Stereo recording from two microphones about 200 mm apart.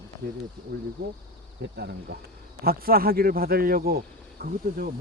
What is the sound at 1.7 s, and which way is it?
Speech, 55° right (ahead or behind).